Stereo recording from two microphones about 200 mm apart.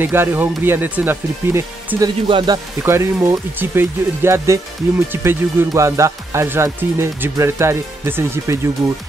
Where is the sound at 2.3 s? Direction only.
25° right (ahead or behind).